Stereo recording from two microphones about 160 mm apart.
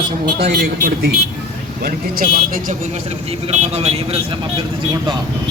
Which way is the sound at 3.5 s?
45° right (ahead or behind).